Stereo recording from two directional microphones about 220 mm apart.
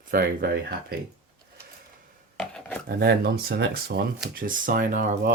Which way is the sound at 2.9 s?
45° right (ahead or behind).